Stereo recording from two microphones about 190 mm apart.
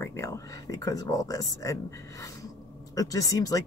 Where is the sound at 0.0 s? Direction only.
15° left (ahead or behind).